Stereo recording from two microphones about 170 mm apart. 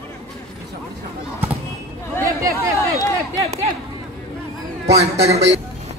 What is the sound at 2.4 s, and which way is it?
Chatter, 20° right (ahead or behind).